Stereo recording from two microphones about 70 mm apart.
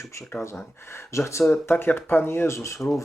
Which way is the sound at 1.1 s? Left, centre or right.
Left.